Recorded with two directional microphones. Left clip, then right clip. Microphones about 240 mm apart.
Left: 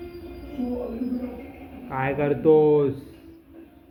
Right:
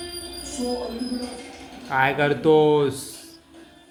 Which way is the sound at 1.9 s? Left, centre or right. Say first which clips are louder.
Right 4 dB; right.